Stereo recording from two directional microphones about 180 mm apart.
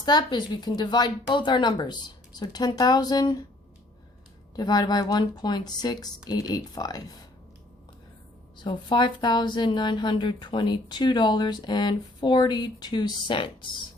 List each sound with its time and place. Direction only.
0.0 s speech: 25° left (ahead or behind)
4.5 s speech: 20° left (ahead or behind)
8.5 s speech: 25° left (ahead or behind)